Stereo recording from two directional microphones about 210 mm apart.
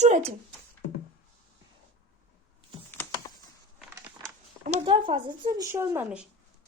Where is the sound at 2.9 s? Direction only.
10° left (ahead or behind).